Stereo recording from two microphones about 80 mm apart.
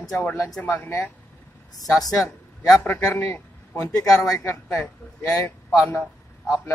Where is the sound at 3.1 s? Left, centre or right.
Left.